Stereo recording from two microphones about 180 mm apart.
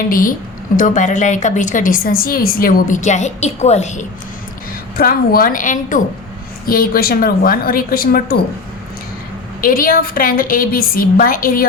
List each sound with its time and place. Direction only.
0.1 s a woman's voice: 50° left (ahead or behind)
4.9 s a woman's voice: 55° left (ahead or behind)
9.6 s a woman's voice: 50° left (ahead or behind)